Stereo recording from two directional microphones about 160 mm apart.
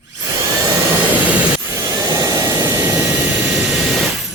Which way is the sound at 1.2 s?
15° right (ahead or behind).